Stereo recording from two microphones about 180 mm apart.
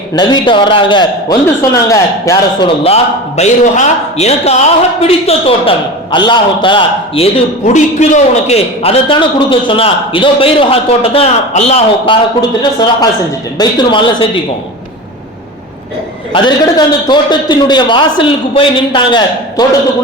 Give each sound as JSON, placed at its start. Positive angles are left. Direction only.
{"t": 0.2, "sound": "a man's voice", "side_deg": 25}
{"t": 7.6, "sound": "a man's voice", "side_deg": 40}
{"t": 12.4, "sound": "a man's voice", "side_deg": 20}
{"t": 16.3, "sound": "a man's voice", "side_deg": 25}